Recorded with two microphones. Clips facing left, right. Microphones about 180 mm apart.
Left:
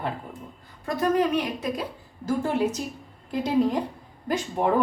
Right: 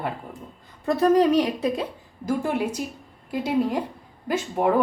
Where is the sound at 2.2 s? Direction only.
10° right (ahead or behind).